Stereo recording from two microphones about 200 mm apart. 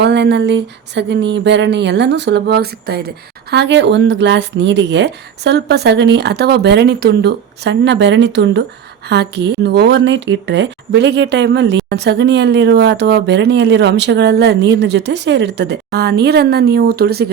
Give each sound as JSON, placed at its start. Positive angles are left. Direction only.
{"t": 0.0, "sound": "speech", "side_deg": -60}